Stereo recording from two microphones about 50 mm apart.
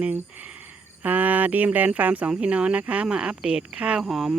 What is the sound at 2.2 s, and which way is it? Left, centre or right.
Speech, right.